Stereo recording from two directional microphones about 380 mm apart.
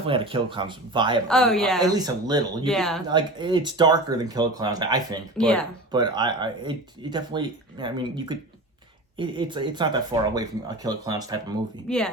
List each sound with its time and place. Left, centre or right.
0.1 s speech: centre
1.3 s speech: centre
1.8 s speech: centre
2.6 s speech: centre
3.1 s speech: centre
5.4 s speech: centre
5.9 s speech: centre
11.9 s speech: centre